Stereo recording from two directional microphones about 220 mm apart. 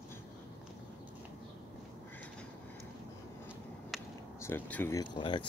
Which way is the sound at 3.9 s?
Centre (ahead or behind).